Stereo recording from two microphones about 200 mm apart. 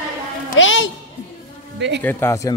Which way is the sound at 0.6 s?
70° left (ahead or behind).